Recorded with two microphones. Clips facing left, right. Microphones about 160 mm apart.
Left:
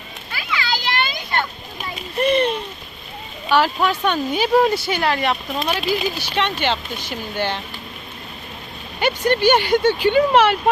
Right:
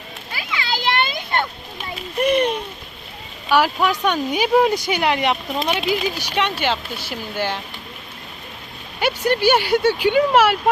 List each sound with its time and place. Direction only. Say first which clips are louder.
0.3 s children playing: left 2 dB; 25° right (ahead or behind)
2.1 s a sound: even; 10° right (ahead or behind)
3.5 s speech: even; 10° right (ahead or behind)
9.0 s speech: left 1 dB; 10° right (ahead or behind)